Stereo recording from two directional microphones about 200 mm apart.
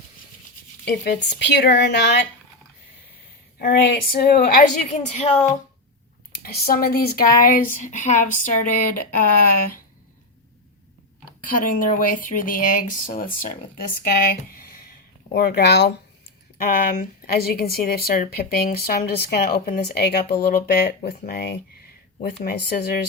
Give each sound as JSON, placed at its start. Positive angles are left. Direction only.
{"t": 0.9, "sound": "a woman's voice", "side_deg": 55}
{"t": 3.6, "sound": "speech", "side_deg": 50}
{"t": 6.3, "sound": "speech", "side_deg": 50}
{"t": 11.4, "sound": "speech", "side_deg": 45}
{"t": 14.5, "sound": "a sound", "side_deg": 50}
{"t": 15.3, "sound": "a woman's voice", "side_deg": 55}
{"t": 16.9, "sound": "speech", "side_deg": 45}